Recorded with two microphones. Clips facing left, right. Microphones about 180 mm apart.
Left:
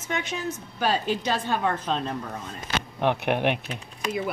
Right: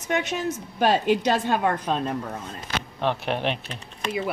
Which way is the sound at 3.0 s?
15° left (ahead or behind).